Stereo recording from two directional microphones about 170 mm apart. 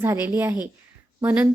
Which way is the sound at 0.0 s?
15° right (ahead or behind).